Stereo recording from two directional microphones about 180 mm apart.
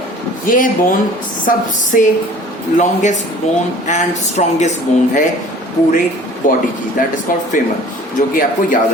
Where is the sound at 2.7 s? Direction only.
40° left (ahead or behind).